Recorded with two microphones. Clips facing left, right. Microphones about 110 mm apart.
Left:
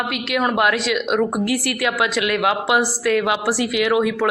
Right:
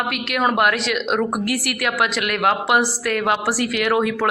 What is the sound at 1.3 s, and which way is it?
A woman's voice, 20° left (ahead or behind).